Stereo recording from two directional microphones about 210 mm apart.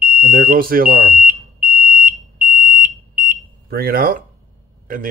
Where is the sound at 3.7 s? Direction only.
45° right (ahead or behind).